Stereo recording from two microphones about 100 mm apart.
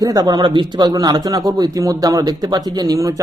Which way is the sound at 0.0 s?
40° right (ahead or behind).